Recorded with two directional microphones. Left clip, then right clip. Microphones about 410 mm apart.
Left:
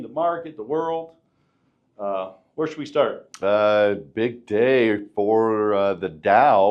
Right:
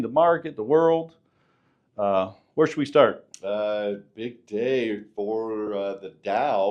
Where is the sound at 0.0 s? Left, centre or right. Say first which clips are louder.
Right 4 dB; right.